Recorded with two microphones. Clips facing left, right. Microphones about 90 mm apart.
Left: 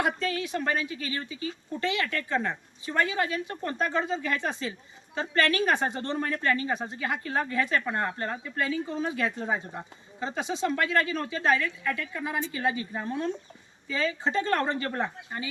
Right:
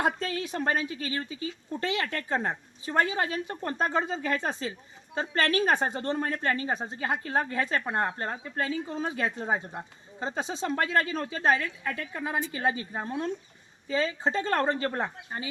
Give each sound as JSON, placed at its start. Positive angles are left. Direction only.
{"t": 0.0, "sound": "speech", "side_deg": -35}